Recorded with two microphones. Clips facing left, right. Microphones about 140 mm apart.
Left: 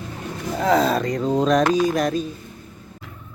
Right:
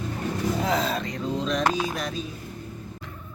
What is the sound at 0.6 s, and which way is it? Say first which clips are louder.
Speech: left 12 dB; 45° left (ahead or behind).